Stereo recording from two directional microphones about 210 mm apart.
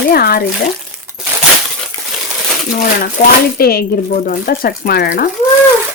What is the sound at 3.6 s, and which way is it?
Speech, 45° left (ahead or behind).